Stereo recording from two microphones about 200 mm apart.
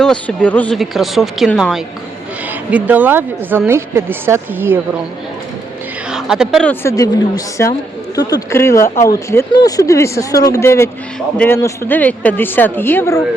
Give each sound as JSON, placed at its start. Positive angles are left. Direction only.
{"t": 0.0, "sound": "a woman's voice", "side_deg": 5}
{"t": 6.1, "sound": "a woman's voice", "side_deg": -5}